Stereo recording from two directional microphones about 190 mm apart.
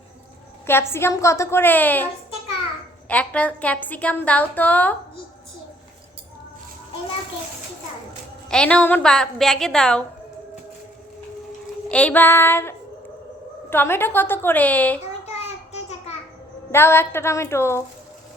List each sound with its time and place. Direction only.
0.7 s a woman's voice: 10° left (ahead or behind)
3.1 s a woman's voice: 5° left (ahead or behind)
8.4 s a woman's voice: 5° left (ahead or behind)
11.9 s a woman's voice: 5° left (ahead or behind)
15.3 s a sound: 35° left (ahead or behind)
16.7 s a woman's voice: 10° left (ahead or behind)